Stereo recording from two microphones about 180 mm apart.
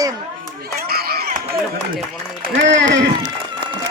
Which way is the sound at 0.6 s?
60° right (ahead or behind).